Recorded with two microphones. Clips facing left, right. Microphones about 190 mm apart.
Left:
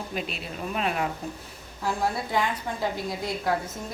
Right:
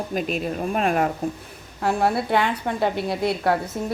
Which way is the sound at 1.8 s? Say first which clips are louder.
Right 6 dB; 65° right (ahead or behind).